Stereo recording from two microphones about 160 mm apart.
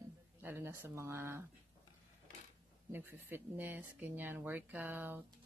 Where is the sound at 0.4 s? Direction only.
15° right (ahead or behind).